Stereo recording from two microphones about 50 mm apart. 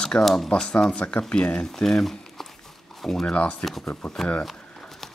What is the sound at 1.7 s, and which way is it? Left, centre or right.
Speech, centre.